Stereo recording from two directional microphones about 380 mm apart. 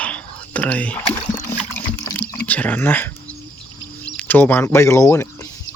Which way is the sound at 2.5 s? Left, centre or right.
Centre.